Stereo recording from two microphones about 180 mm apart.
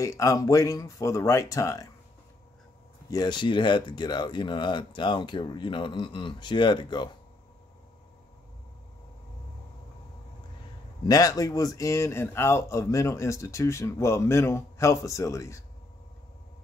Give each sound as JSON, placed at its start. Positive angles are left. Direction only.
{"t": 0.0, "sound": "speech", "side_deg": 20}
{"t": 3.1, "sound": "speech", "side_deg": 20}
{"t": 11.1, "sound": "speech", "side_deg": 20}